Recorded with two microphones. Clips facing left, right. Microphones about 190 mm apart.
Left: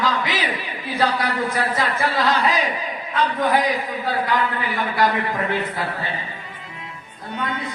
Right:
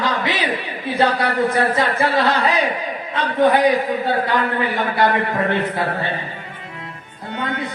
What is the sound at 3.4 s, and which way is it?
A man's voice, 65° right (ahead or behind).